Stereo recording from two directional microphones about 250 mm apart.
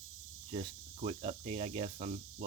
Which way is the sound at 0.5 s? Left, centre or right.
Right.